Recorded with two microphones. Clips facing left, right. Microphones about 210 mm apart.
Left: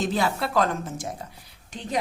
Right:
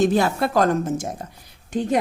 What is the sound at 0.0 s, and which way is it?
Speech, 50° right (ahead or behind).